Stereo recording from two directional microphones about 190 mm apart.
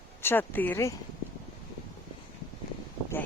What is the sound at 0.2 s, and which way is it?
Speech, 10° left (ahead or behind).